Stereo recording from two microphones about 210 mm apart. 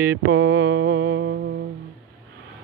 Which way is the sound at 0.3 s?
60° right (ahead or behind).